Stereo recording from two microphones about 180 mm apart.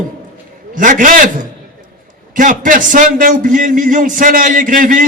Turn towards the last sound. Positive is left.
turn(degrees=-50)  # may be behind; listen again after turning